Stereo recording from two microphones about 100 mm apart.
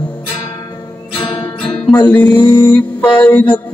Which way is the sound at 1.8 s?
15° left (ahead or behind).